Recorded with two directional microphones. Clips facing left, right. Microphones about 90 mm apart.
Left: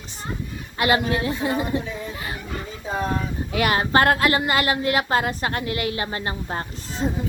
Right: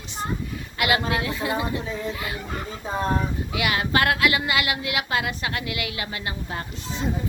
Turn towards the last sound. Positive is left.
turn(degrees=35)  # may be behind; listen again after turning